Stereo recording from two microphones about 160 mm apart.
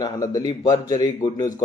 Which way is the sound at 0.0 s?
25° left (ahead or behind).